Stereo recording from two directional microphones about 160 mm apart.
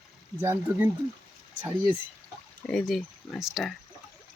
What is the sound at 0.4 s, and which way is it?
Speech, 15° right (ahead or behind).